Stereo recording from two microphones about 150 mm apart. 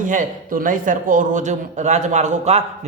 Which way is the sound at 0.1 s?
60° right (ahead or behind).